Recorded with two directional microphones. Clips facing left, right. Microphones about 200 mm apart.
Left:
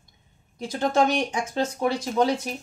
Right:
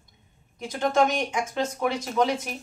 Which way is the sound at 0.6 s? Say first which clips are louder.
Left 1 dB; 35° left (ahead or behind).